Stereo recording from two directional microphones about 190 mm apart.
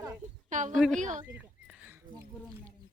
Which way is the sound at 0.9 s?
40° right (ahead or behind).